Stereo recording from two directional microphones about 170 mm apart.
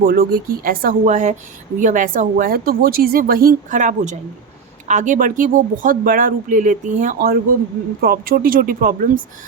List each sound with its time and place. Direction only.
0.0 s a woman's voice: 65° right (ahead or behind)